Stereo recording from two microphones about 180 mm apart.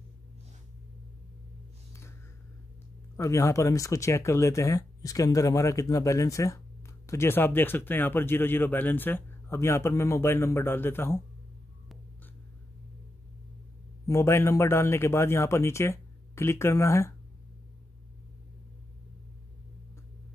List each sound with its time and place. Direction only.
3.2 s speech: 15° left (ahead or behind)
14.0 s speech: 15° left (ahead or behind)